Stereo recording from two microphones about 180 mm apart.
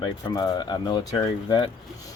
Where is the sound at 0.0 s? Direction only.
20° left (ahead or behind).